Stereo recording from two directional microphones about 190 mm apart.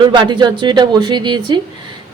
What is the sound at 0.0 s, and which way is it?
A woman's voice, 25° right (ahead or behind).